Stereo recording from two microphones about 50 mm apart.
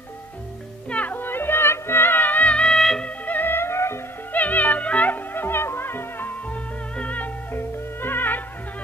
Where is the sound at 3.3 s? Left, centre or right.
Left.